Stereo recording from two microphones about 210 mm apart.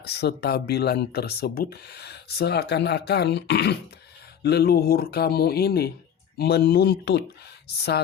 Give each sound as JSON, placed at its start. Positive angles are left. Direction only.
{"t": 0.0, "sound": "speech", "side_deg": 50}